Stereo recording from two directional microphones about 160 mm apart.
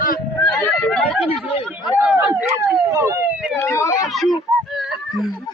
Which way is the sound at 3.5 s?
15° left (ahead or behind).